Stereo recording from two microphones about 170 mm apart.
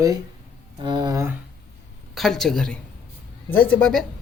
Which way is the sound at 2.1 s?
Centre (ahead or behind).